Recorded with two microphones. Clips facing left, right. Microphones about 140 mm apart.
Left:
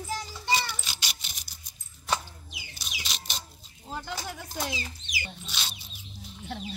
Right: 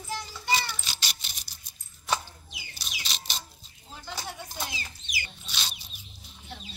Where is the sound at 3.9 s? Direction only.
85° left.